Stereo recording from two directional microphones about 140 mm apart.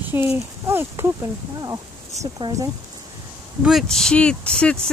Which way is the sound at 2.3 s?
30° right (ahead or behind).